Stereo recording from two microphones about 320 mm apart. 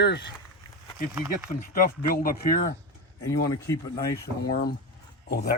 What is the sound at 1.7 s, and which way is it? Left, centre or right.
Speech, left.